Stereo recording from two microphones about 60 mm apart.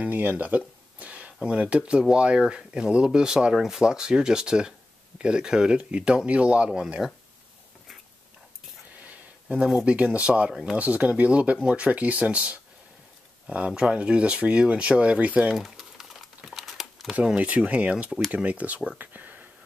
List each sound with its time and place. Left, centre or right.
0.0 s speech: right
7.0 s speech: centre
9.0 s a sound: right
9.8 s speech: right
15.5 s pigeon: centre
16.4 s crumpling: centre
17.1 s speech: centre
18.9 s whispering: right